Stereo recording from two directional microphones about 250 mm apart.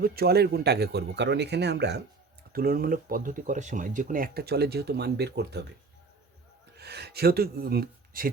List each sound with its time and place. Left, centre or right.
0.0 s speech: right
6.7 s speech: right